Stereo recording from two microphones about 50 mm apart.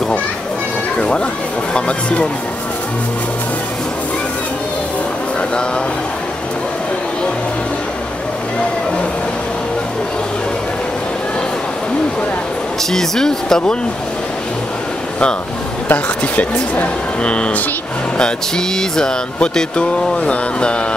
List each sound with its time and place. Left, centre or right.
0.9 s a sound: centre
1.7 s speech: left
12.9 s speech: centre
15.9 s speech: left
18.8 s speech: centre